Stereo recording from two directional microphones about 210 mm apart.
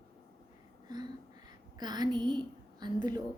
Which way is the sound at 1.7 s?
20° right (ahead or behind).